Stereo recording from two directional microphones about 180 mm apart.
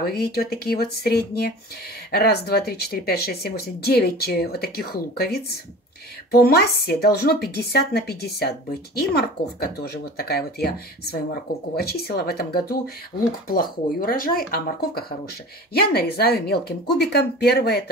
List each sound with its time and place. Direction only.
0.0 s speech: 60° left (ahead or behind)